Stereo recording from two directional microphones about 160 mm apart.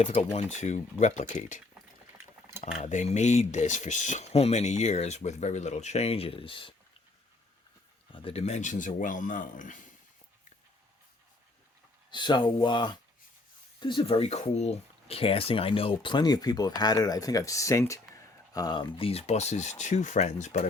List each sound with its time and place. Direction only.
0.0 s speech: 45° left (ahead or behind)
8.1 s speech: 35° left (ahead or behind); by 9.8 s 55° left (ahead or behind)
12.1 s speech: 30° left (ahead or behind); by 20.7 s 45° left (ahead or behind)